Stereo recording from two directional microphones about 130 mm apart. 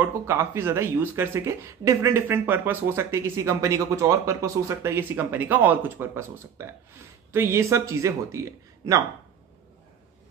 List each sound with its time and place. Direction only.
0.0 s speech: 15° right (ahead or behind)